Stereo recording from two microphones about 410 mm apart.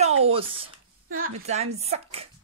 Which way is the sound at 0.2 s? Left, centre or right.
Centre.